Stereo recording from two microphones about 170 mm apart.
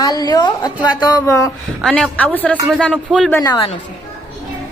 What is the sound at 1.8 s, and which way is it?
A woman's voice, 5° left (ahead or behind).